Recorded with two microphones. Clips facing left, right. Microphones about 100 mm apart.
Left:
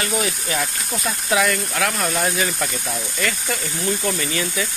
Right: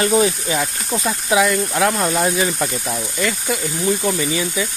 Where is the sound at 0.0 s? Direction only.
30° right (ahead or behind).